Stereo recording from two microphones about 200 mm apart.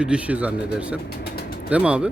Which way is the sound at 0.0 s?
5° right (ahead or behind).